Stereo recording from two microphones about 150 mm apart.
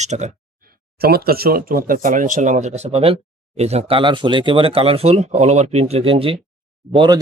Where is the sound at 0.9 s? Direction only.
90° right.